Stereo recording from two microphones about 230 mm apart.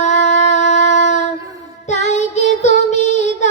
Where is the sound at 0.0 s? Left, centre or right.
Left.